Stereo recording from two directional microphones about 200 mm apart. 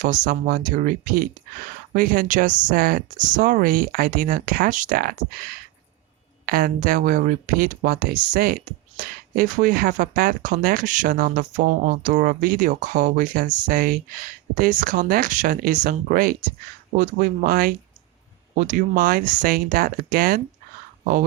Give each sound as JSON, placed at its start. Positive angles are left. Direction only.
{"t": 0.0, "sound": "speech", "side_deg": -40}